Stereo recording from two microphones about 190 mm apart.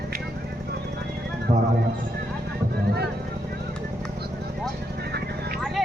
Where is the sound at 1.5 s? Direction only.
25° right (ahead or behind).